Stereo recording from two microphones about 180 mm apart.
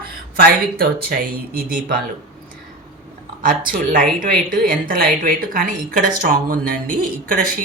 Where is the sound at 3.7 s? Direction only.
50° right (ahead or behind).